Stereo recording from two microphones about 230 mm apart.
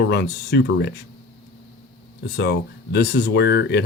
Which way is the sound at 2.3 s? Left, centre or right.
Left.